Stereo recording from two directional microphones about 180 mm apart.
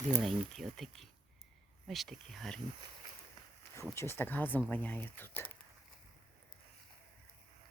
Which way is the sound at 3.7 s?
15° left (ahead or behind).